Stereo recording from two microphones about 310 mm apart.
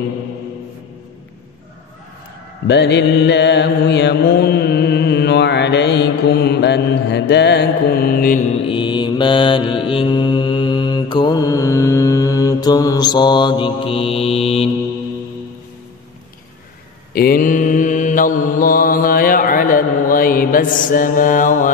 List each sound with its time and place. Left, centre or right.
2.7 s mantra: left
8.6 s mantra: centre
17.1 s mantra: left